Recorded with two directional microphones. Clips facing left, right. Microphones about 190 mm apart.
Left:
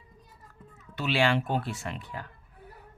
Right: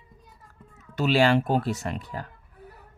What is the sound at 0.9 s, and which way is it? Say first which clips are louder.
Speech: right 5 dB; 40° right (ahead or behind).